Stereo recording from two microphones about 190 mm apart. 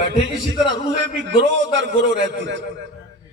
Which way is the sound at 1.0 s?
70° right (ahead or behind).